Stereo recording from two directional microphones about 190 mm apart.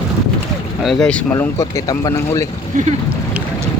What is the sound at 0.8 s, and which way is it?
Speech, centre (ahead or behind).